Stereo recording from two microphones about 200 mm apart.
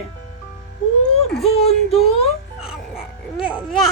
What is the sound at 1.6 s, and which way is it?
Speech, 30° left (ahead or behind).